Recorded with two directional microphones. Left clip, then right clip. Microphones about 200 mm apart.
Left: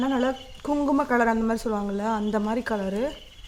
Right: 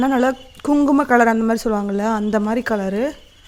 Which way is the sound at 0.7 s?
35° right (ahead or behind).